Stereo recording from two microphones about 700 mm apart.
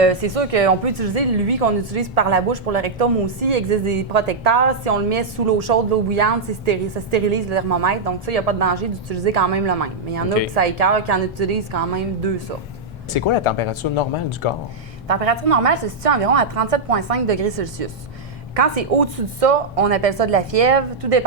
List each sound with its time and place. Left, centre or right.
0.0 s a woman's voice: right
13.1 s speech: left
15.0 s a woman's voice: right